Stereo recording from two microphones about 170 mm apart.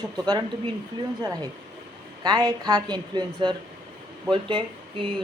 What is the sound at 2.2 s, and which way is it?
Speech, 25° right (ahead or behind).